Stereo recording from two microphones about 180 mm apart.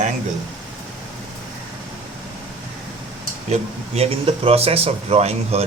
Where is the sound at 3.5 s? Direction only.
35° right (ahead or behind).